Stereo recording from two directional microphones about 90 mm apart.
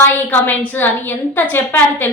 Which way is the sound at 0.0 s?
25° left (ahead or behind).